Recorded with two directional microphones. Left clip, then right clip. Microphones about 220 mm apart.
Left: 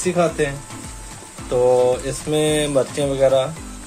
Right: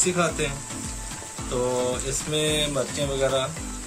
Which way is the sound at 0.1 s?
30° left (ahead or behind).